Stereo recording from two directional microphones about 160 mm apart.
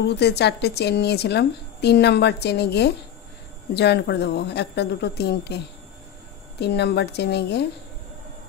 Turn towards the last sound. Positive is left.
turn(degrees=90)